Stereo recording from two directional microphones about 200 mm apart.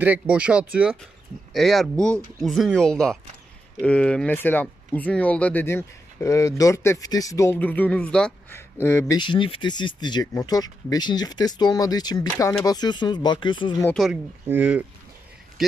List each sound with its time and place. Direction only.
0.0 s speech: 5° right (ahead or behind); by 9.2 s 10° left (ahead or behind)
9.2 s speech: 25° left (ahead or behind)
13.8 s speech: centre (ahead or behind)